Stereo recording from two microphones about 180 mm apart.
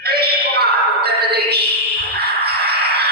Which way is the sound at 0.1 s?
60° right (ahead or behind).